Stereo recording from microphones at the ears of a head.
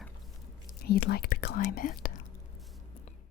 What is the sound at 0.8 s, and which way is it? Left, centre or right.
Speech, left.